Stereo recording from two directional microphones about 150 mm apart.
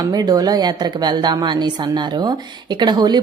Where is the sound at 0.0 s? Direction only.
25° right (ahead or behind).